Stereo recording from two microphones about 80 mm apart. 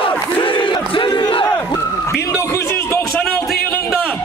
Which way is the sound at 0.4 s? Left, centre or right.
Left.